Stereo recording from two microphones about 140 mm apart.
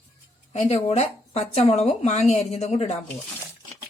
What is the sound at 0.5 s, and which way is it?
Speech, 50° left (ahead or behind).